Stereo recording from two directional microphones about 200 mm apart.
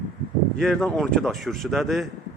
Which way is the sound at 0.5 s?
Centre (ahead or behind).